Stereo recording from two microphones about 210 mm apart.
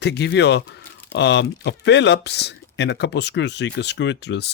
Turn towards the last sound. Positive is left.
turn(degrees=55)  # may be behind; listen again after turning